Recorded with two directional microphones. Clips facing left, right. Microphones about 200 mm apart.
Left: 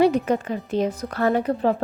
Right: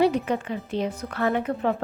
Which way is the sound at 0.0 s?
45° left (ahead or behind).